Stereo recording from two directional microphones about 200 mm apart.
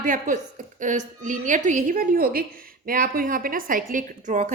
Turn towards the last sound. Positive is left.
turn(degrees=-40)  # may be behind; listen again after turning